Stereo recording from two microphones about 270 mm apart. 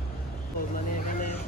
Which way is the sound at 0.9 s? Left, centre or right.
Left.